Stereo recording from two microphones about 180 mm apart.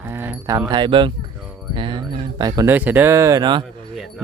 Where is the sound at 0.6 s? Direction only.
25° right (ahead or behind).